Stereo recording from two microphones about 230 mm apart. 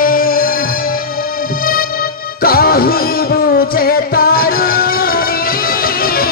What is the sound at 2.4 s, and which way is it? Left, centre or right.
Music, left.